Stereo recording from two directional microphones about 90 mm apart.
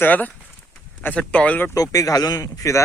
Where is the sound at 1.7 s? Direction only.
40° left (ahead or behind).